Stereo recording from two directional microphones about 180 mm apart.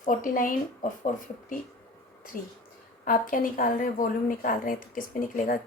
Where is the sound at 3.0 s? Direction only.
50° left (ahead or behind).